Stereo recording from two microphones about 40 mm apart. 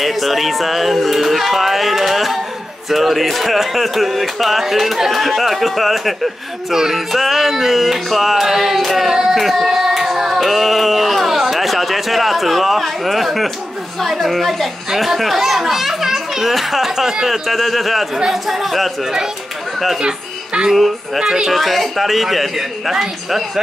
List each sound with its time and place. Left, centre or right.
0.0 s music: centre
14.9 s a child's voice: centre
16.9 s speech: centre
17.3 s music: centre
20.0 s speech: centre
20.7 s music: centre
21.2 s speech: centre
21.5 s music: centre